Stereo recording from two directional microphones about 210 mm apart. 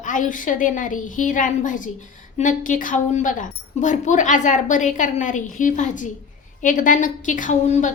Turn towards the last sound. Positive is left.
turn(degrees=35)  # may be behind; listen again after turning